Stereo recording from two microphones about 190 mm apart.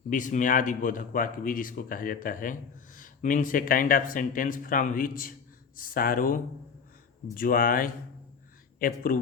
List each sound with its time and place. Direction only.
0.1 s speech: 40° left (ahead or behind)